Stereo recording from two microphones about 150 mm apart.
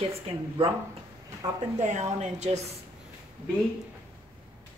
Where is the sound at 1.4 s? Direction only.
25° right (ahead or behind).